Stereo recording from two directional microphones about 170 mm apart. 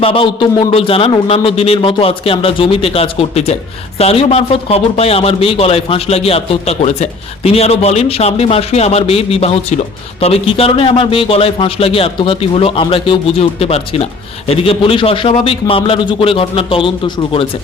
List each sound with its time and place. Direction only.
0.0 s a man's voice: 30° left (ahead or behind)